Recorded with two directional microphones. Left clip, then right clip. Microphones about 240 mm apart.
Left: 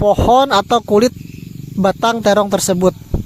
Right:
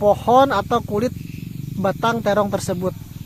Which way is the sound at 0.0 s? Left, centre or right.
Left.